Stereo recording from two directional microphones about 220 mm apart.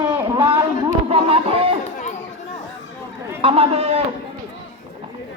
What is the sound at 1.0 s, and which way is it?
Music, 25° right (ahead or behind).